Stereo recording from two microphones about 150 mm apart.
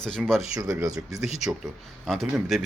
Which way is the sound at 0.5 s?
25° right (ahead or behind).